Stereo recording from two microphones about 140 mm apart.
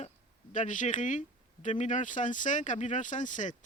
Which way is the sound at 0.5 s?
65° left (ahead or behind).